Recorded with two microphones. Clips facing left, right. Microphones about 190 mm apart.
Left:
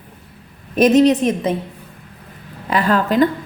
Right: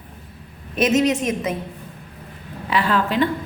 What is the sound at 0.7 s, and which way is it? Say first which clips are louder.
Speech: left 6 dB; 35° left (ahead or behind).